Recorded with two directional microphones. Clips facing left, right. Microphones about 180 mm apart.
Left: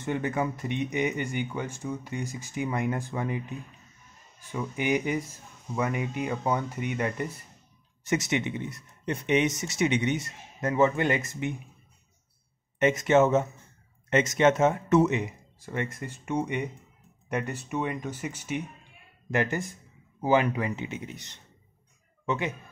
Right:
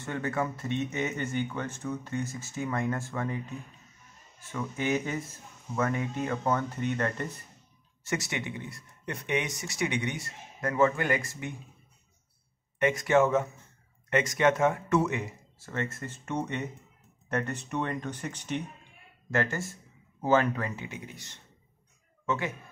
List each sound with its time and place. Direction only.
0.0 s speech: 15° left (ahead or behind)
12.7 s a man's voice: 20° left (ahead or behind)